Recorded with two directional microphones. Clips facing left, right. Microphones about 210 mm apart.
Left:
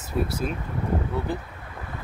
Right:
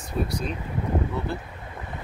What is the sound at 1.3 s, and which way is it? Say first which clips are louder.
Speech: left 2 dB; 15° left (ahead or behind).